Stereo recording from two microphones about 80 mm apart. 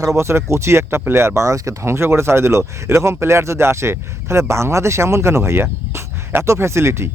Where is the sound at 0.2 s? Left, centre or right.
Right.